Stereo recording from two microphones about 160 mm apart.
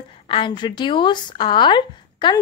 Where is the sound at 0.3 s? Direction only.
30° left (ahead or behind).